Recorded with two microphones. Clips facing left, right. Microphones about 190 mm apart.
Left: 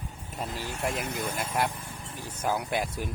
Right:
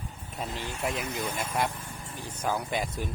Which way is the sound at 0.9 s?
55° left (ahead or behind).